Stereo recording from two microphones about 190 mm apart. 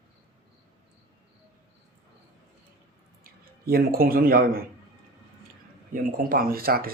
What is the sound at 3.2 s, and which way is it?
Speech, 50° right (ahead or behind).